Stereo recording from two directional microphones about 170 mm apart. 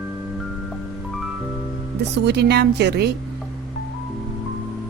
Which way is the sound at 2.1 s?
80° right.